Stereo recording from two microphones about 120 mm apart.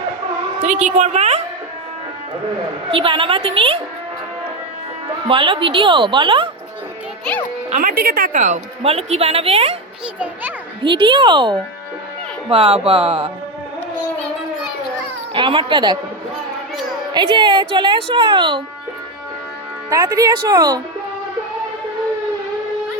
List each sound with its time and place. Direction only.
0.6 s a woman's voice: 80° right; by 1.4 s 60° right (ahead or behind)
2.9 s a woman's voice: 45° right (ahead or behind)
5.3 s a woman's voice: 45° right (ahead or behind)
7.3 s music: 5° left (ahead or behind)
8.3 s speech: 90° right
8.8 s a woman's voice: 60° right (ahead or behind)
10.8 s speech: 40° right (ahead or behind)
12.5 s a woman's voice: 50° right (ahead or behind)
15.3 s a woman's voice: 45° right (ahead or behind)
17.2 s a woman's voice: 40° right (ahead or behind)
19.9 s speech: 30° right (ahead or behind)